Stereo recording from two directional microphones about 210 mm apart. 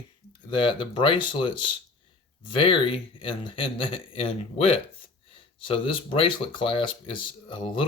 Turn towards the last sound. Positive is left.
turn(degrees=25)  # may be behind; listen again after turning